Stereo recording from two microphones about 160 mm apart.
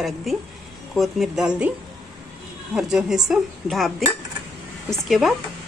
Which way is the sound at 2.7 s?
5° right (ahead or behind).